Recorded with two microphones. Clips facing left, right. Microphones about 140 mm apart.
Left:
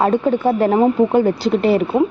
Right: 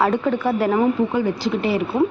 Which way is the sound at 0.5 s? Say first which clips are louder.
Left 4 dB; 45° left (ahead or behind).